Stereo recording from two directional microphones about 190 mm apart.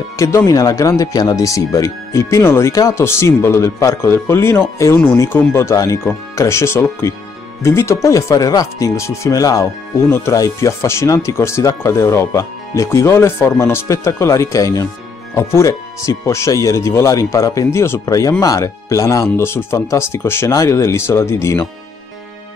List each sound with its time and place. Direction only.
0.2 s speech: 15° left (ahead or behind)